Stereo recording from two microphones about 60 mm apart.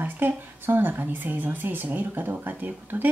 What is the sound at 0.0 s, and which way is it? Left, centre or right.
Speech, right.